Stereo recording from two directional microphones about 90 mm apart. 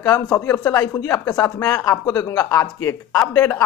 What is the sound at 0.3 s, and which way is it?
Speech, 40° left (ahead or behind).